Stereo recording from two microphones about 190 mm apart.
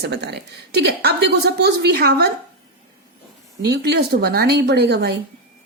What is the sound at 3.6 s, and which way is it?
Speech, 60° right (ahead or behind).